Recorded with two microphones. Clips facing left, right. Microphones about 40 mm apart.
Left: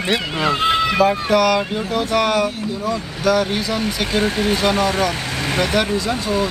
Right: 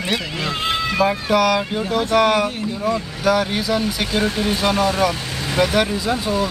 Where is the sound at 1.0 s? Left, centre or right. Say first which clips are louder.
Right 1 dB; centre.